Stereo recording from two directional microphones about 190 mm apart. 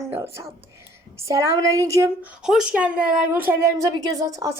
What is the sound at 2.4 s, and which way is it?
A woman's voice, centre (ahead or behind).